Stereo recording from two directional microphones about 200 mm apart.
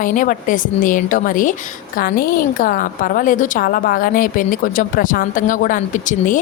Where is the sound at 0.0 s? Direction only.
40° left (ahead or behind).